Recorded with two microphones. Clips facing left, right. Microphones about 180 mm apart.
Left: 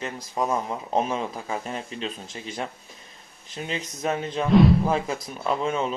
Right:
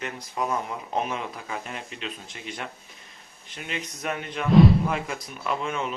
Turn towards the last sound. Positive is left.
turn(degrees=30)  # may be behind; listen again after turning